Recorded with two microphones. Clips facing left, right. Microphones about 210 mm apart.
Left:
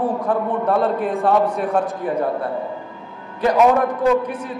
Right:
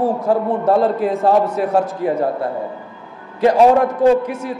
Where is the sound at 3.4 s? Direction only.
30° right (ahead or behind).